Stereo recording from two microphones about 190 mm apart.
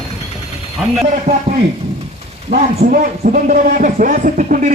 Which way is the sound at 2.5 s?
35° right (ahead or behind).